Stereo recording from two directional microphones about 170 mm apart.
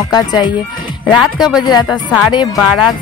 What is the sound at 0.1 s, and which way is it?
Speech, 25° left (ahead or behind).